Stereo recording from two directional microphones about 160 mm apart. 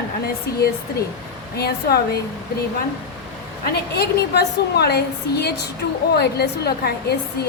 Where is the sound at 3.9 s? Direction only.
90° left.